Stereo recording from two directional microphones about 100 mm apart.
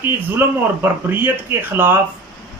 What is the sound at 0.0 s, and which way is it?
Speech, 20° right (ahead or behind).